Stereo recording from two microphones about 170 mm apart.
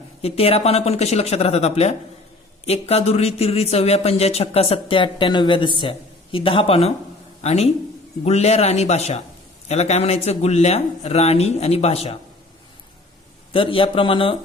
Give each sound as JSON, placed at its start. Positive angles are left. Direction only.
{"t": 0.2, "sound": "a man's voice", "side_deg": 35}
{"t": 13.5, "sound": "speech", "side_deg": 30}